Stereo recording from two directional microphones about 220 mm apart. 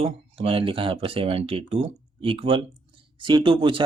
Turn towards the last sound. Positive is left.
turn(degrees=-25)  # may be behind; listen again after turning